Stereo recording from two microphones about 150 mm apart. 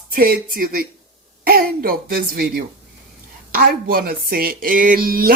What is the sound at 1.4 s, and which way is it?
Speech, 85° right.